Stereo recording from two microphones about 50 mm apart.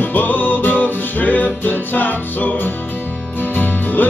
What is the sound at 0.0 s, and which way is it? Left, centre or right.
Music, left.